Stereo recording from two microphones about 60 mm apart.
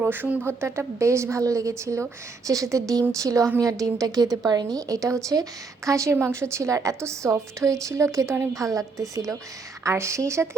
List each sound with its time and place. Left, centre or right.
0.4 s a woman's voice: right
6.1 s a woman's voice: right